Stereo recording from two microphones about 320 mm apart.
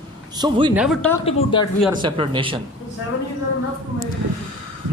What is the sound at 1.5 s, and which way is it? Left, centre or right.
Speech, centre.